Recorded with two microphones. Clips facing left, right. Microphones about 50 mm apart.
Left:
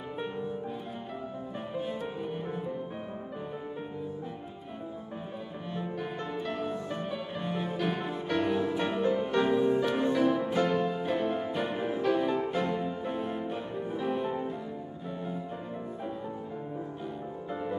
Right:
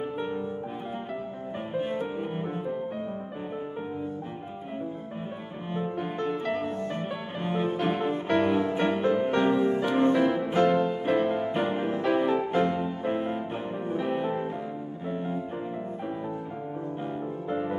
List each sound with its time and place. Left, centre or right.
1.7 s music: right
6.6 s music: right
17.5 s music: right